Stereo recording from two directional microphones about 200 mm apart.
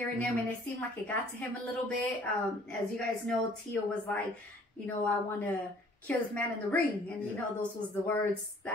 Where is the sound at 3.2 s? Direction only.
5° left (ahead or behind).